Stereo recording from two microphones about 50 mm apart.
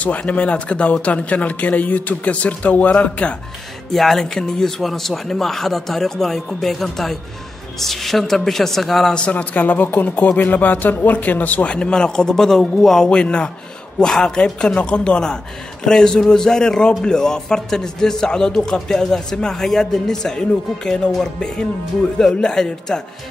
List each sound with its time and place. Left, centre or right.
0.0 s a man's voice: left
3.9 s a man's voice: centre
9.3 s a man's voice: left; by 22.9 s centre